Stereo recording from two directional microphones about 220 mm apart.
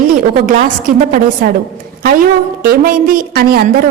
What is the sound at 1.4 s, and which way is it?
Speech, 45° right (ahead or behind).